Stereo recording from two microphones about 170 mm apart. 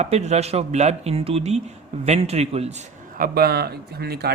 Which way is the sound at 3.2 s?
65° right (ahead or behind).